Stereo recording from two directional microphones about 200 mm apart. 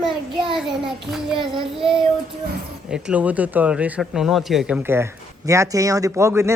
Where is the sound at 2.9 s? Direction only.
5° right (ahead or behind).